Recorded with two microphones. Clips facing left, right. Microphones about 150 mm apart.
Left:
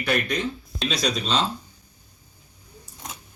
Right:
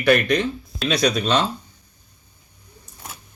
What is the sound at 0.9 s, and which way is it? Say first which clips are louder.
Speech: right 6 dB; 60° right (ahead or behind).